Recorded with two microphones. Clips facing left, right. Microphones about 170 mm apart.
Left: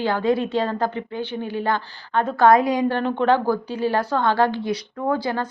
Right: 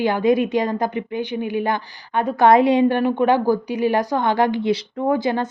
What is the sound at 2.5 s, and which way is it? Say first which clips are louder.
Speech: right 5 dB; 25° right (ahead or behind).